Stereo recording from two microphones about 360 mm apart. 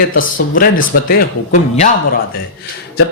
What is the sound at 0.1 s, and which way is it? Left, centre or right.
Speech, left.